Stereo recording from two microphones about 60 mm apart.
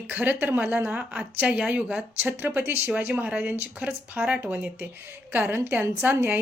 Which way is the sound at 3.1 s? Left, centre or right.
Right.